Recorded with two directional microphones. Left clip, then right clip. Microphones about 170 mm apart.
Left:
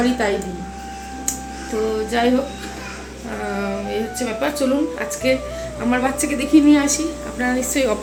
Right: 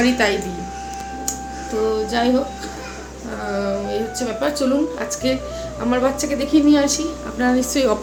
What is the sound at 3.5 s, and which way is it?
A woman's voice, 5° right (ahead or behind).